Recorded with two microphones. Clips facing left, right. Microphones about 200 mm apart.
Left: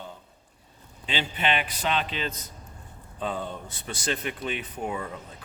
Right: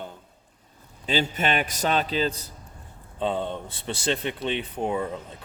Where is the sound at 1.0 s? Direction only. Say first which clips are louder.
Right 3 dB; 40° right (ahead or behind).